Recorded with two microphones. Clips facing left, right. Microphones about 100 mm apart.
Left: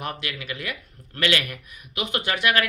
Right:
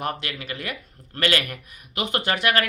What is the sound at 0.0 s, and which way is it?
Speech, 40° right (ahead or behind).